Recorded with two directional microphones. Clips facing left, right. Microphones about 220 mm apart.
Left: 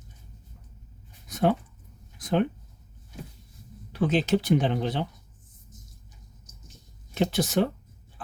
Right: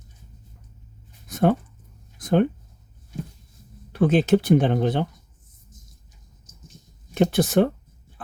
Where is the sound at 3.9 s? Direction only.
50° right (ahead or behind).